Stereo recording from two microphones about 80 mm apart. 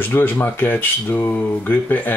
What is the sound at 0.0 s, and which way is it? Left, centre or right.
Speech, left.